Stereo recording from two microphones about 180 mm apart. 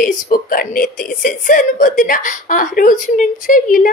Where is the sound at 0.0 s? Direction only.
50° left (ahead or behind).